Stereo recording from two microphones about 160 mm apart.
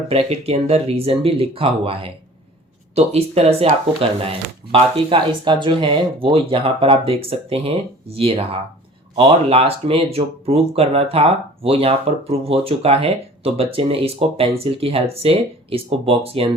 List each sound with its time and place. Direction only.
0.1 s speech: 40° right (ahead or behind)